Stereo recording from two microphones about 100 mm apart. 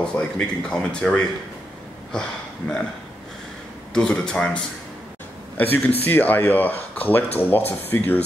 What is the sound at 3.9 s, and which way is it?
Speech, 10° left (ahead or behind).